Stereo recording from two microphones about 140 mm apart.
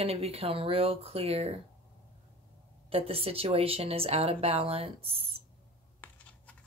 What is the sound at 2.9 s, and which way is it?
Speech, 45° right (ahead or behind).